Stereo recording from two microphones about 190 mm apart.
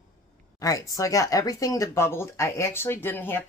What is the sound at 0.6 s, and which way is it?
Speech, 20° left (ahead or behind).